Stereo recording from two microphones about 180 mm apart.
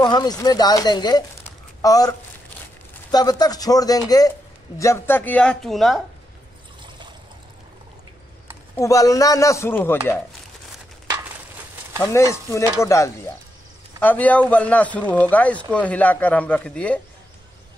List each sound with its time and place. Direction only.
0.0 s speech: 25° left (ahead or behind); by 6.0 s centre (ahead or behind)
8.7 s speech: 20° left (ahead or behind)
12.0 s speech: 15° left (ahead or behind)